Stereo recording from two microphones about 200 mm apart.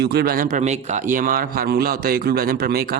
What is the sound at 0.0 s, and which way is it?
Speech, 55° right (ahead or behind).